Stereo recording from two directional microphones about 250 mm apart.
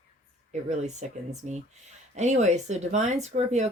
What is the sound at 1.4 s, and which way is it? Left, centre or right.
Speech, right.